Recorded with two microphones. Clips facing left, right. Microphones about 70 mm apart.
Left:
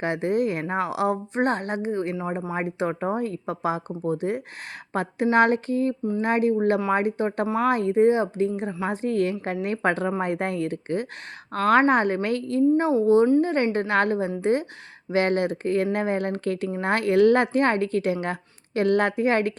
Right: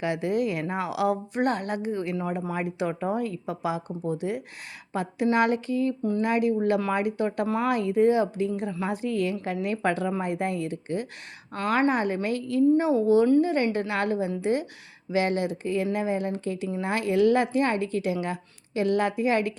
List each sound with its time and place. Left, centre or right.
0.0 s a woman's voice: left
6.0 s speech: centre
6.2 s a woman's voice: left